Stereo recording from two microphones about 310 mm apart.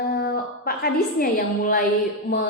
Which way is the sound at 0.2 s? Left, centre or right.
Left.